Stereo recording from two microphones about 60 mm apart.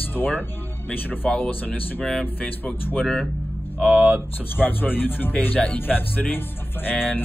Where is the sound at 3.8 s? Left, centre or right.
Right.